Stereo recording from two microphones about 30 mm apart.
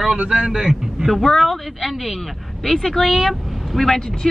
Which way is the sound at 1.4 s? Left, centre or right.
Centre.